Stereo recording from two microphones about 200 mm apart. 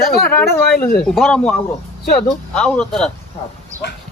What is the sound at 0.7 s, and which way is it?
Speech, 50° left (ahead or behind).